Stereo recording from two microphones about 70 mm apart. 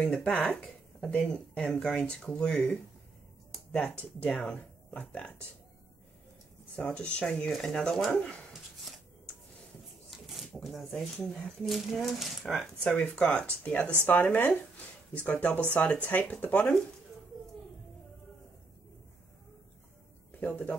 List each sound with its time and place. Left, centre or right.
0.0 s speech: centre
4.2 s speech: centre
6.8 s speech: centre
7.5 s speech: centre
10.1 s a sound: centre
11.6 s speech: centre
20.2 s speech: left